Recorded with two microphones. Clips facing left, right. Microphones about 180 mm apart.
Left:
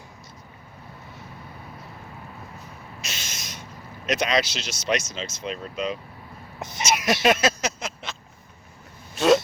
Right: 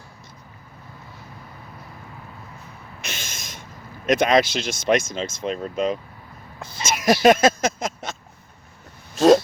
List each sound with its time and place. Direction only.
3.0 s speech: 55° right (ahead or behind)
6.6 s speech: 20° left (ahead or behind)
7.0 s speech: 45° right (ahead or behind)
9.1 s speech: 45° right (ahead or behind)